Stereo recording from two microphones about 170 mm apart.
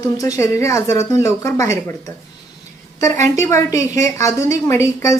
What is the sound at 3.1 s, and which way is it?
Speech, 45° right (ahead or behind).